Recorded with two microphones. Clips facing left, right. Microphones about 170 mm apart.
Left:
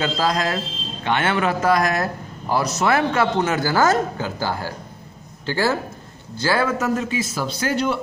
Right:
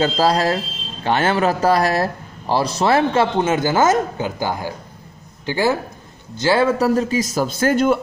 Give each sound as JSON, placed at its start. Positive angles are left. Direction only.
{"t": 0.0, "sound": "a man's voice", "side_deg": -35}